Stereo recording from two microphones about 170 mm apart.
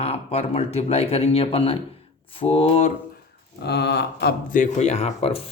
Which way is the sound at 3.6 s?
75° left (ahead or behind).